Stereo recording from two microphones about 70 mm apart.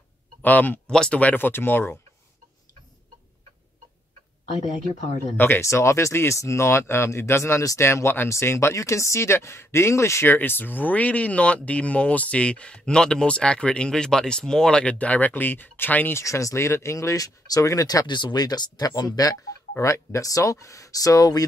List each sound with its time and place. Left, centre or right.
0.4 s speech: left
0.9 s speech: centre
1.2 s speech: left
5.6 s speech: left
10.3 s speech: left
16.2 s speech: left
18.9 s speech: left
19.8 s speech: left